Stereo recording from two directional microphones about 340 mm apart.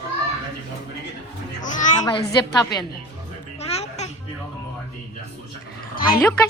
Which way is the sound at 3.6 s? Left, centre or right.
Centre.